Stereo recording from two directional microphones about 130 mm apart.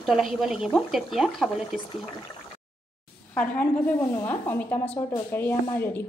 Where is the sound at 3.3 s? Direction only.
15° left (ahead or behind).